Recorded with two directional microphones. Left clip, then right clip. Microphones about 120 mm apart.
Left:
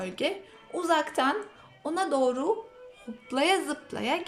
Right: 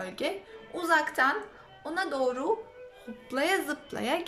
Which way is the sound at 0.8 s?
20° left (ahead or behind).